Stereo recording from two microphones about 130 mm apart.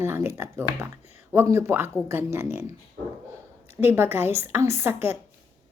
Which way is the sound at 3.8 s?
20° right (ahead or behind).